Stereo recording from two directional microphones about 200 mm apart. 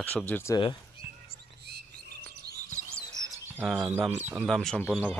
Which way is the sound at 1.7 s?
55° right (ahead or behind).